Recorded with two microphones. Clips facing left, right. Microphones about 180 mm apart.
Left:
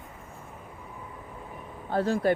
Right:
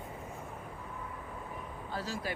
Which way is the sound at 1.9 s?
55° left (ahead or behind).